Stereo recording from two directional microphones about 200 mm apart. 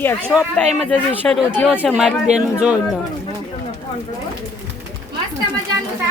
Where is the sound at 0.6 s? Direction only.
5° left (ahead or behind).